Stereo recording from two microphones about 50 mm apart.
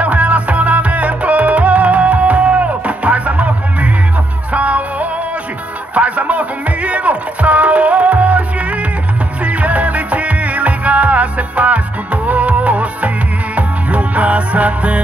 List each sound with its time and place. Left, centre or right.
0.0 s music: right